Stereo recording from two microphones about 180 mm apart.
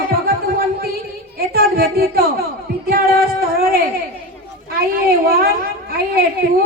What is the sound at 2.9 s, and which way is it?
Music, 55° right (ahead or behind).